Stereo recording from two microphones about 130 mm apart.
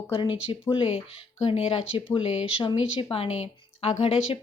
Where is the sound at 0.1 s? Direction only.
40° left (ahead or behind).